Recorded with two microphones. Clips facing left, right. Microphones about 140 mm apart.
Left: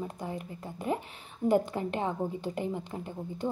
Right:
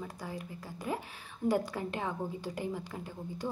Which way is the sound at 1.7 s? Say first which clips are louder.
Left 4 dB; 20° left (ahead or behind).